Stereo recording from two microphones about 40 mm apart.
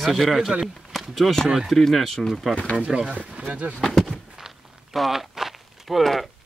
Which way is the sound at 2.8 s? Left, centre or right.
Right.